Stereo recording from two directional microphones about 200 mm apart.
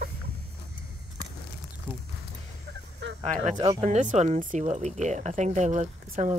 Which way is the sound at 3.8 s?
35° right (ahead or behind).